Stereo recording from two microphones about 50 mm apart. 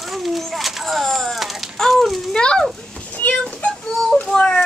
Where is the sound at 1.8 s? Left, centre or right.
Centre.